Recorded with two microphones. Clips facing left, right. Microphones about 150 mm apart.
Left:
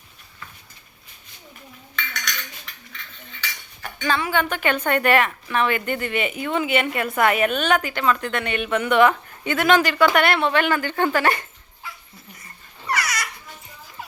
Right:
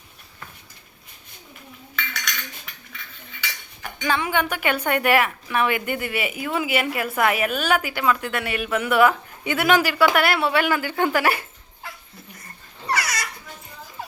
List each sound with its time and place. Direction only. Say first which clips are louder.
2.0 s cutlery: even; 5° right (ahead or behind)
3.9 s speech: left 1 dB; 15° right (ahead or behind)
12.9 s a sound: even; 30° right (ahead or behind)